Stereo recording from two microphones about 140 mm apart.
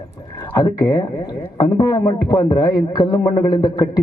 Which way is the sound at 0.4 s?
25° left (ahead or behind).